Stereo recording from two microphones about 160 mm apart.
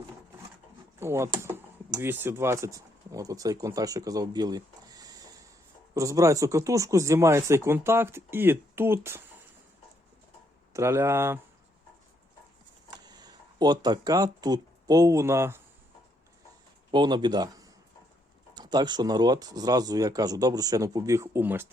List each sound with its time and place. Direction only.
0.9 s speech: 15° right (ahead or behind)
10.8 s speech: 15° right (ahead or behind)
13.1 s speech: 25° right (ahead or behind)
16.9 s speech: 30° right (ahead or behind)